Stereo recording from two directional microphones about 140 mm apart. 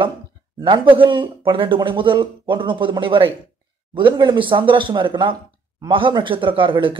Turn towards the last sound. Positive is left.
turn(degrees=-35)  # may be behind; listen again after turning